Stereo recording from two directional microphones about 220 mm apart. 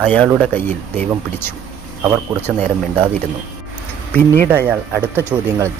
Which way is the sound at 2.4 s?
10° left (ahead or behind).